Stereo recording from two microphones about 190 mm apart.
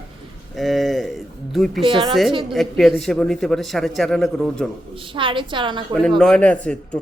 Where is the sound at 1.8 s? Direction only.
25° right (ahead or behind).